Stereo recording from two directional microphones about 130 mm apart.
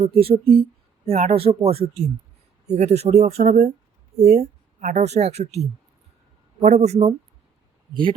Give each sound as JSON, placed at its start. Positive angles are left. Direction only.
{"t": 0.0, "sound": "speech", "side_deg": -50}
{"t": 3.4, "sound": "speech", "side_deg": -80}
{"t": 4.1, "sound": "speech", "side_deg": 0}
{"t": 4.8, "sound": "speech", "side_deg": -65}
{"t": 6.6, "sound": "speech", "side_deg": -65}